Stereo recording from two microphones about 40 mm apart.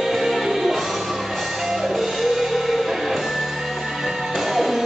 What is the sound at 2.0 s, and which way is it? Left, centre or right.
Music, centre.